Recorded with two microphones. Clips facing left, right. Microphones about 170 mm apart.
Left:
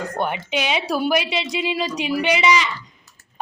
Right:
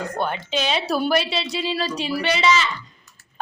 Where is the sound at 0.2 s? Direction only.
20° left (ahead or behind).